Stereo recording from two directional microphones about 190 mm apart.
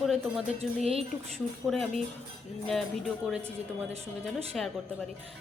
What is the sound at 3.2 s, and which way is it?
Speech, 5° right (ahead or behind).